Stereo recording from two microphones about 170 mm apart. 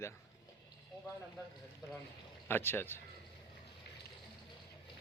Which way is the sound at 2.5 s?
15° left (ahead or behind).